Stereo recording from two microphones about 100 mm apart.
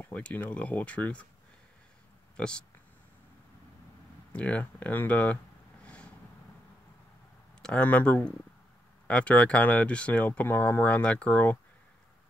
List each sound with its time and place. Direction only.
0.0 s speech: 15° left (ahead or behind)
2.3 s speech: 10° left (ahead or behind)
4.3 s speech: 10° left (ahead or behind)
7.6 s speech: 15° left (ahead or behind)